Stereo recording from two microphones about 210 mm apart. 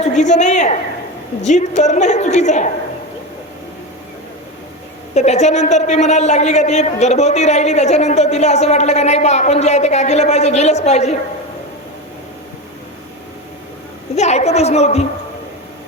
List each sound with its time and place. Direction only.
0.0 s a woman's voice: 35° left (ahead or behind)
5.1 s a woman's voice: 30° left (ahead or behind)
14.2 s a woman's voice: 30° left (ahead or behind)